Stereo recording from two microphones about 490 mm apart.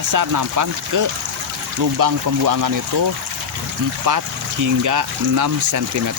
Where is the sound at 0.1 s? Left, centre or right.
Right.